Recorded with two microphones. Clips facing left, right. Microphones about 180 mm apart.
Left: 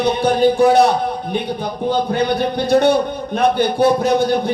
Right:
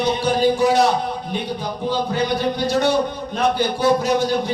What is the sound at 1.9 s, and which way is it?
A man's voice, 60° left (ahead or behind).